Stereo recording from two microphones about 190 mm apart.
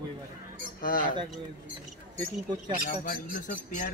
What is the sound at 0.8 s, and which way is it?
Speech, 45° left (ahead or behind).